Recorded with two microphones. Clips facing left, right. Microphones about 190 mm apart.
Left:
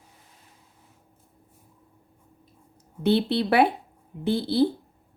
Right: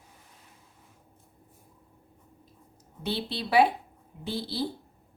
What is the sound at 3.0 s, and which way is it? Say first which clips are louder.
Speech: left 11 dB; 60° left (ahead or behind).